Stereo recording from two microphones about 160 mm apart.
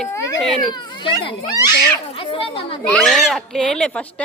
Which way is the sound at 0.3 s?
5° left (ahead or behind).